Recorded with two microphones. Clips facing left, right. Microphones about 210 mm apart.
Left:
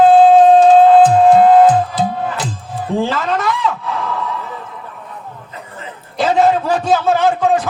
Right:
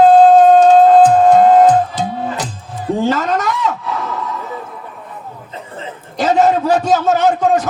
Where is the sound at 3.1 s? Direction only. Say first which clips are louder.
Right 2 dB; 40° right (ahead or behind).